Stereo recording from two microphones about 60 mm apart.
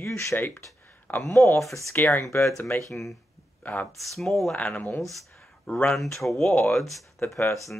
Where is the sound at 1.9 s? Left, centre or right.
Left.